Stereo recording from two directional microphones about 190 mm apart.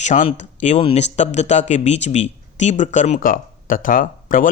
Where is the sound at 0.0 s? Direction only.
40° left (ahead or behind).